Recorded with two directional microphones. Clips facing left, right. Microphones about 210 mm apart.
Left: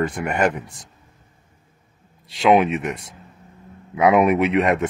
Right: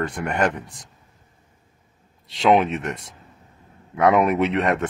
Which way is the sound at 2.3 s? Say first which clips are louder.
Left 2 dB; 5° left (ahead or behind).